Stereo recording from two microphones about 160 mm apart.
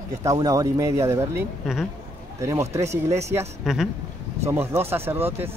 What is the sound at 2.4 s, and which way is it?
Speech, 20° right (ahead or behind).